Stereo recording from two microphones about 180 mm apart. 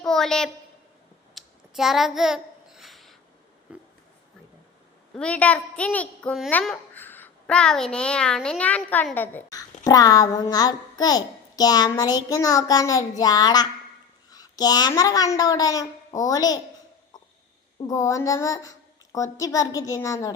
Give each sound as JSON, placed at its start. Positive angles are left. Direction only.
{"t": 0.0, "sound": "a sound", "side_deg": 5}
{"t": 5.1, "sound": "a child's voice", "side_deg": 5}
{"t": 17.7, "sound": "a child's voice", "side_deg": 20}